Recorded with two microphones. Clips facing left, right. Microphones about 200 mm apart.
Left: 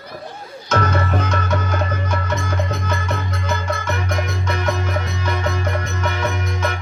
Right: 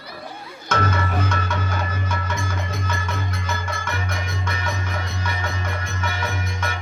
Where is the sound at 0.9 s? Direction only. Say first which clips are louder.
Left 4 dB; 55° left (ahead or behind).